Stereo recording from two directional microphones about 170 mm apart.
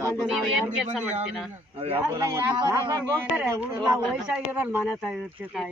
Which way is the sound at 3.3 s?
10° right (ahead or behind).